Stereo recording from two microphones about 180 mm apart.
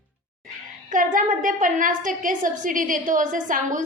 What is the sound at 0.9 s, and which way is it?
A woman's voice, 45° right (ahead or behind).